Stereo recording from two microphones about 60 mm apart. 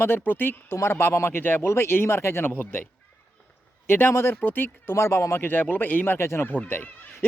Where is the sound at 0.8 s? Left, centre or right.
Left.